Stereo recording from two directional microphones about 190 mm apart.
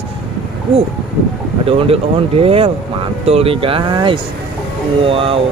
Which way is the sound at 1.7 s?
30° right (ahead or behind).